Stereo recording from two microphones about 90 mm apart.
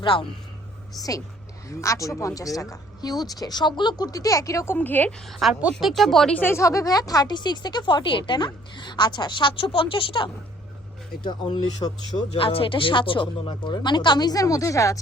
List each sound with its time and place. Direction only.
0.0 s speech: 70° left (ahead or behind)
0.9 s a woman's voice: 45° left (ahead or behind); by 5.1 s 20° left (ahead or behind)
5.3 s speech: centre (ahead or behind)
6.3 s speech: 25° left (ahead or behind); by 10.2 s 75° left (ahead or behind)
11.2 s speech: 60° left (ahead or behind)
12.3 s speech: 90° left; by 14.9 s 35° left (ahead or behind)